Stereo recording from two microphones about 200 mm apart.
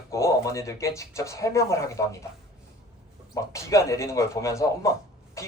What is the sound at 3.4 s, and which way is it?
Speech, 15° left (ahead or behind).